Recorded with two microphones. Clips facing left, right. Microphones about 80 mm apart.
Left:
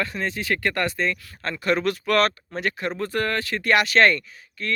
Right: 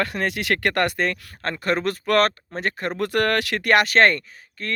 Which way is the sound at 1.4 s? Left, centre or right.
Right.